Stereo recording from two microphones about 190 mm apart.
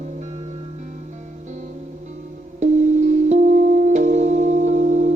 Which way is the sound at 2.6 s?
40° right (ahead or behind).